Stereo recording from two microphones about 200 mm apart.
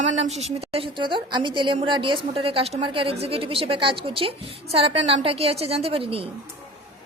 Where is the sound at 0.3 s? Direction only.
35° right (ahead or behind).